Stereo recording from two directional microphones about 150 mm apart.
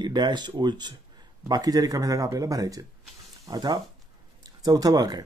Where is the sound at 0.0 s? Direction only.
30° right (ahead or behind).